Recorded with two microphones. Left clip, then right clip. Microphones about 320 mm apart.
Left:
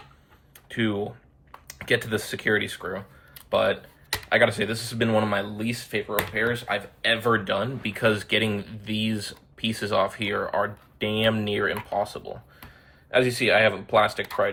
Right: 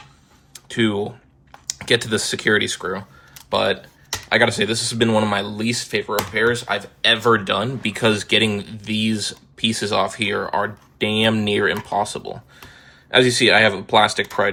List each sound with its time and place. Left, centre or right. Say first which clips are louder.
0.5 s tick-tock: right 6 dB; centre
1.8 s speech: right 6 dB; centre
13.3 s speech: right 6 dB; centre